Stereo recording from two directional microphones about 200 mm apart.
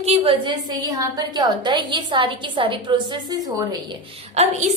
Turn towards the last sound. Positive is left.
turn(degrees=-35)  # may be behind; listen again after turning